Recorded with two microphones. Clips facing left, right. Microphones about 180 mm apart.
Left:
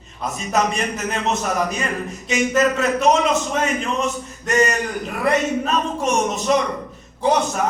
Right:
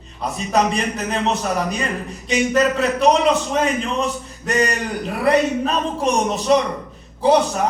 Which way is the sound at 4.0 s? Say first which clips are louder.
Even; 35° right (ahead or behind).